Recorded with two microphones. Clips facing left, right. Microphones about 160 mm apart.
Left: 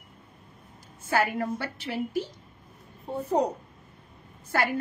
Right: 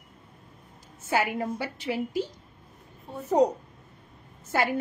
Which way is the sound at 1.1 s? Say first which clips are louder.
Left 1 dB; 15° right (ahead or behind).